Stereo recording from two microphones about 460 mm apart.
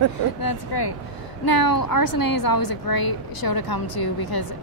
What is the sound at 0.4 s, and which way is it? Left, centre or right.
A woman's voice, left.